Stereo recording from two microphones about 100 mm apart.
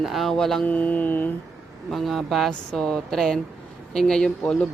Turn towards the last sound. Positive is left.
turn(degrees=10)  # may be behind; listen again after turning